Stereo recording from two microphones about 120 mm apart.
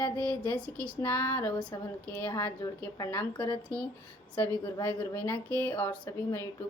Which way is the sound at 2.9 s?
30° left (ahead or behind).